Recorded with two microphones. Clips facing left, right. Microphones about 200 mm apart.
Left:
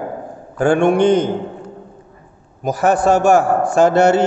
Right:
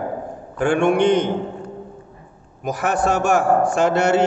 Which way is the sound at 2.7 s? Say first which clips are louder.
Left 6 dB; 35° left (ahead or behind).